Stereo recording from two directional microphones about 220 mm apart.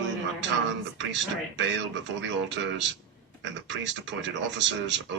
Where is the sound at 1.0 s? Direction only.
55° right (ahead or behind).